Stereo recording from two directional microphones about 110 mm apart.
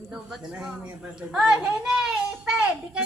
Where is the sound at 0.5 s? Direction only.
10° right (ahead or behind).